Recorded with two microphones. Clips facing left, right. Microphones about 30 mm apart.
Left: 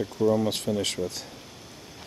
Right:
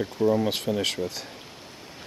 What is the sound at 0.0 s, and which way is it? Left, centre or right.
Speech, right.